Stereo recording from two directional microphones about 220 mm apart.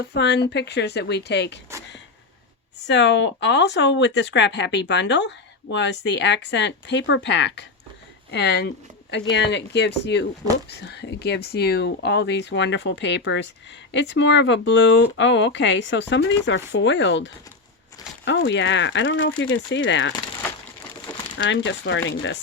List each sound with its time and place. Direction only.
0.1 s speech: 50° left (ahead or behind)
2.8 s speech: 55° left (ahead or behind)
21.3 s speech: 55° left (ahead or behind)